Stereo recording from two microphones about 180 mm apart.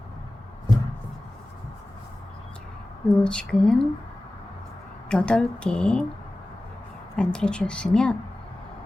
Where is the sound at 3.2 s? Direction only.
5° left (ahead or behind).